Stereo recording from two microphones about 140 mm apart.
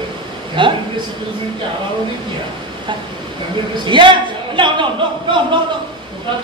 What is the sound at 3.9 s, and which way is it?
A man's voice, 35° right (ahead or behind).